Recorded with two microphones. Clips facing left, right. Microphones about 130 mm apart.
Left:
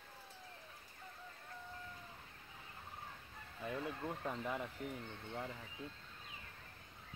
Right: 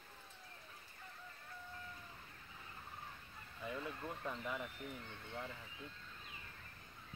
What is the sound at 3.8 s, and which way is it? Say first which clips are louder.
Speech: left 3 dB; 20° left (ahead or behind).